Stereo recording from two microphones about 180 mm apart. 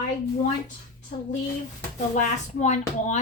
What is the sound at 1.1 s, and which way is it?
Speech, 40° left (ahead or behind).